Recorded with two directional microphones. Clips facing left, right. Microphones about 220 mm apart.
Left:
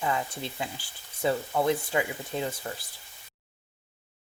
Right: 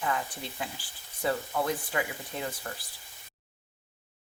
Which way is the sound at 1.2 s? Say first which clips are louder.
Left 3 dB; 25° left (ahead or behind).